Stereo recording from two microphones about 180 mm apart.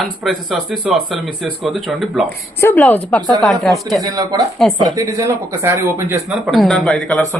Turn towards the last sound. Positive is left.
turn(degrees=5)  # may be behind; listen again after turning